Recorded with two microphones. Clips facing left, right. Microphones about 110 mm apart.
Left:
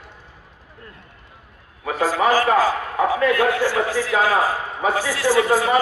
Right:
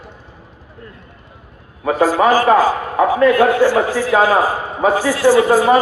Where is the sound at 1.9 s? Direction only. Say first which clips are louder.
Right 6 dB; 45° right (ahead or behind).